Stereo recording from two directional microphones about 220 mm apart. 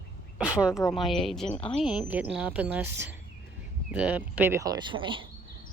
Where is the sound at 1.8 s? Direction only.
5° right (ahead or behind); by 5.2 s 20° right (ahead or behind).